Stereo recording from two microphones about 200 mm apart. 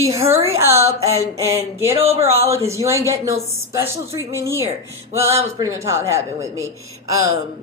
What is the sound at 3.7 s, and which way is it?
Speech, 15° right (ahead or behind).